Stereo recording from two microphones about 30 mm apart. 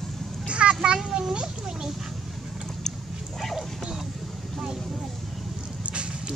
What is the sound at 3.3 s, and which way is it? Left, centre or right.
Bow-wow, centre.